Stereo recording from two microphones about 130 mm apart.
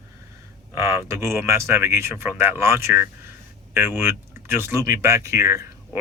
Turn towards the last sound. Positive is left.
turn(degrees=-20)  # may be behind; listen again after turning